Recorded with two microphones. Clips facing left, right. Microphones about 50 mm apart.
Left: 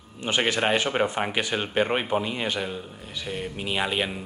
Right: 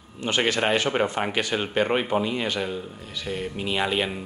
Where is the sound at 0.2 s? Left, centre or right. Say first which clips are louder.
Right 1 dB; centre.